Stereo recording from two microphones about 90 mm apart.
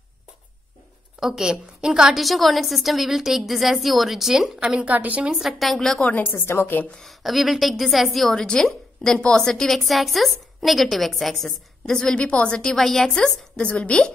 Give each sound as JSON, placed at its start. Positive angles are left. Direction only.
{"t": 1.2, "sound": "a woman's voice", "side_deg": -5}
{"t": 5.4, "sound": "a woman's voice", "side_deg": 0}
{"t": 7.0, "sound": "a woman's voice", "side_deg": 0}